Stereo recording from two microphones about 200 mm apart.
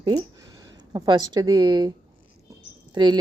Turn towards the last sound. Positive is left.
turn(degrees=-20)  # may be behind; listen again after turning